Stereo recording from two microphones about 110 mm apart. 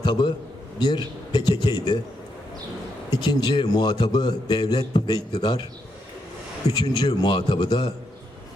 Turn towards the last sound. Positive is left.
turn(degrees=40)  # may be behind; listen again after turning